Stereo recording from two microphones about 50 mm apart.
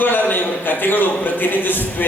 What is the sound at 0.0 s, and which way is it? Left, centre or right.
A man's voice, left.